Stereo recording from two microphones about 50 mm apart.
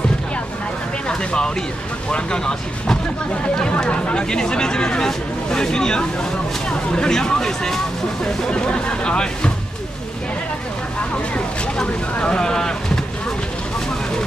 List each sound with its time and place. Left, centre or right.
1.0 s a sound: centre
2.0 s speech: centre
11.3 s speech: centre